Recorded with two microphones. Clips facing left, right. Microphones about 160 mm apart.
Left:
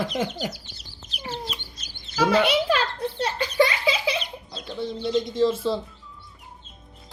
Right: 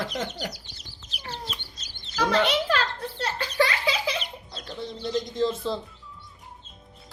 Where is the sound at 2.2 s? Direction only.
10° left (ahead or behind).